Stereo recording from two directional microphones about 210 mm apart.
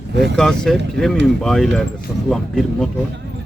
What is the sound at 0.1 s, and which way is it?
Speech, 55° right (ahead or behind).